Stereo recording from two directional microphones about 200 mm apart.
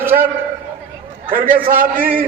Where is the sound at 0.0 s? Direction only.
10° right (ahead or behind).